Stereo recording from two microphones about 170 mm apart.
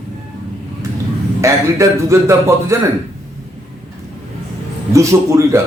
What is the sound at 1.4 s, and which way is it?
A man's voice, 15° right (ahead or behind).